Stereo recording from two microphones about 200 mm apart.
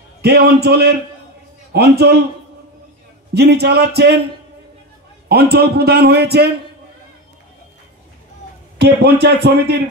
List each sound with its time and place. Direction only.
0.2 s a man's voice: 55° right (ahead or behind)
3.3 s a man's voice: 55° right (ahead or behind)
5.3 s a man's voice: 50° right (ahead or behind)
8.7 s speech: 55° right (ahead or behind)